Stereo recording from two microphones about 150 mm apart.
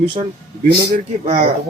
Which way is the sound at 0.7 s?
90° right.